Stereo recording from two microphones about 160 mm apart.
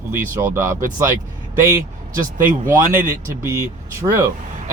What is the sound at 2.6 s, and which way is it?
Speech, 15° right (ahead or behind).